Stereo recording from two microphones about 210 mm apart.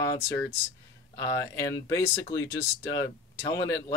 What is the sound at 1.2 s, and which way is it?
Speech, 15° left (ahead or behind).